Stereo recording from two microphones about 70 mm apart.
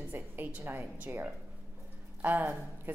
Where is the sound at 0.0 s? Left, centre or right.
Right.